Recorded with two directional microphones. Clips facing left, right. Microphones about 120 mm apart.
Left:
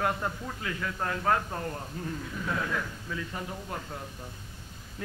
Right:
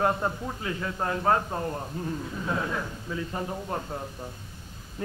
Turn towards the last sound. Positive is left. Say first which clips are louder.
# right 5 dB
turn(degrees=-30)  # may be behind; listen again after turning